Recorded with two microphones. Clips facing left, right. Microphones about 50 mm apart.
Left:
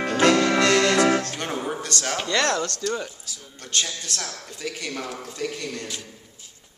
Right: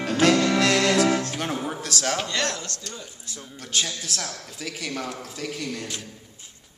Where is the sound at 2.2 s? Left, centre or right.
Left.